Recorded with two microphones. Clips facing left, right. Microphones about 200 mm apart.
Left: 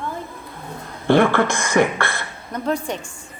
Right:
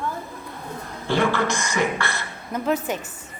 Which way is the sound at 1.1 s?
55° left (ahead or behind).